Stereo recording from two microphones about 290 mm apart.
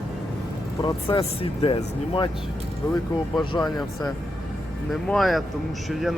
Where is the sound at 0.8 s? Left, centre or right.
Centre.